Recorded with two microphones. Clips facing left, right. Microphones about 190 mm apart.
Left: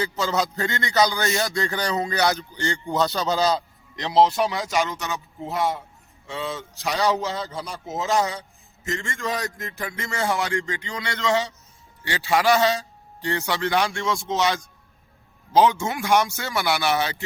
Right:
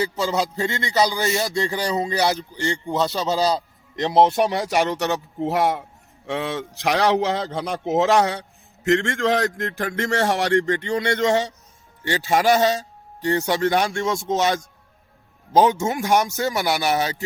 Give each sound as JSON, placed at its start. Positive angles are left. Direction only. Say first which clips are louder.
{"t": 0.3, "sound": "a man's voice", "louder": "right 1 dB", "side_deg": -30}
{"t": 1.1, "sound": "speech", "louder": "right 2 dB", "side_deg": -5}
{"t": 2.0, "sound": "a man's voice", "louder": "right 1 dB", "side_deg": -30}
{"t": 2.8, "sound": "speech", "louder": "left 1 dB", "side_deg": -5}
{"t": 3.2, "sound": "speech", "louder": "right 2 dB", "side_deg": -35}
{"t": 3.9, "sound": "a man's voice", "louder": "right 2 dB", "side_deg": -50}